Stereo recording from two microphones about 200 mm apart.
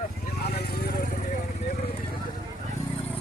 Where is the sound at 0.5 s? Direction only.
50° left (ahead or behind).